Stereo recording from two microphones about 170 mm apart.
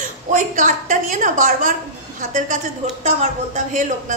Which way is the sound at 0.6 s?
50° right (ahead or behind).